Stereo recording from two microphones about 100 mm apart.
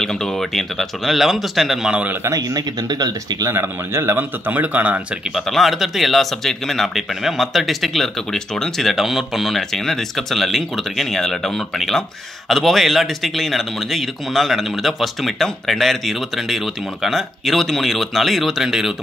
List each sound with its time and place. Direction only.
0.0 s speech: 5° left (ahead or behind); by 2.1 s 10° right (ahead or behind)
2.2 s speech: 40° right (ahead or behind)
3.5 s speech: 25° right (ahead or behind)
5.3 s speech: centre (ahead or behind)